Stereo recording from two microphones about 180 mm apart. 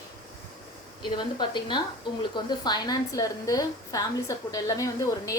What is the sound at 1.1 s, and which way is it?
A woman's voice, 25° left (ahead or behind).